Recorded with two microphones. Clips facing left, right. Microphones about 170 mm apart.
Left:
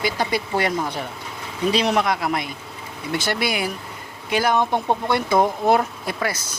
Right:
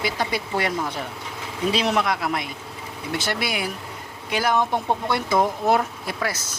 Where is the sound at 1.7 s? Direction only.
Centre (ahead or behind).